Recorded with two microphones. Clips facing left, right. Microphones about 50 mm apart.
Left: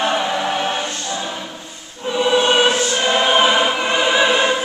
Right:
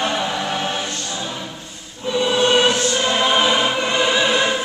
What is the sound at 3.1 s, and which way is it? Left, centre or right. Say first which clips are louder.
Music: left 3 dB; centre.